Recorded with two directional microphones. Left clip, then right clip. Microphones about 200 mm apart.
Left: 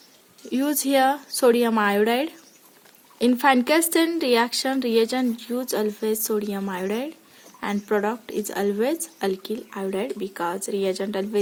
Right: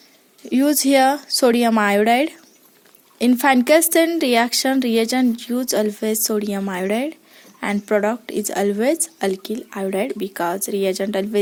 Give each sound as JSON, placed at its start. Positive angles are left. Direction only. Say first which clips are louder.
{"t": 0.5, "sound": "speech", "louder": "right 6 dB", "side_deg": -30}